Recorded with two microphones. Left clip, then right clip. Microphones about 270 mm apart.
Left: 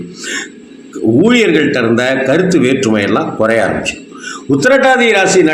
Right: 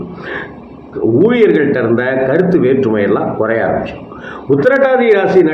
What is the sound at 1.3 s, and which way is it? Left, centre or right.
A man's voice, left.